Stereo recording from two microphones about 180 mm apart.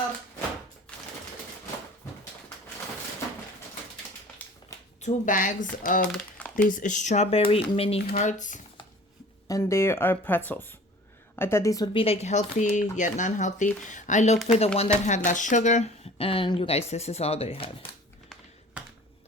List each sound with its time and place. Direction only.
5.0 s speech: 45° left (ahead or behind)
8.1 s speech: 45° left (ahead or behind)
9.5 s speech: 15° left (ahead or behind)
11.9 s speech: 35° left (ahead or behind)